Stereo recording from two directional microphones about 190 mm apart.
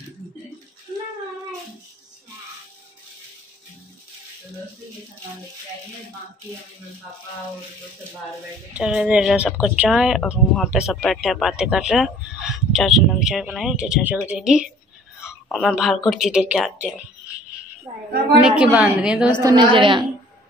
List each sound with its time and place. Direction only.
8.7 s a woman's voice: 5° right (ahead or behind)
18.4 s speech: 5° right (ahead or behind)
19.4 s a woman's voice: 25° right (ahead or behind)